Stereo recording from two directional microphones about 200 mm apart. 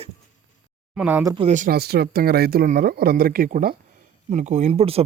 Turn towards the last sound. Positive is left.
turn(degrees=-30)  # may be behind; listen again after turning